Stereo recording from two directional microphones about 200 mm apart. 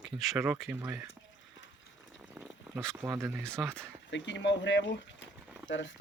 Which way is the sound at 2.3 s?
Centre (ahead or behind).